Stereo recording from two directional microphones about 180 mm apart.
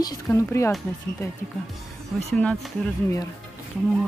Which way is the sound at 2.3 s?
5° left (ahead or behind).